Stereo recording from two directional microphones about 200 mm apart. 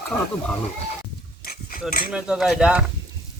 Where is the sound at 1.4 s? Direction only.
45° left (ahead or behind).